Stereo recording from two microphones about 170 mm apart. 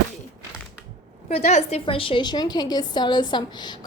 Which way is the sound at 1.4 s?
40° left (ahead or behind).